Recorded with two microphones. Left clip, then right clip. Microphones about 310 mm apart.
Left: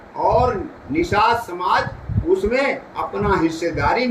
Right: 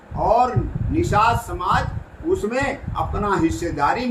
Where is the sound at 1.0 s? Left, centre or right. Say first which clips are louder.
Left 1 dB; centre.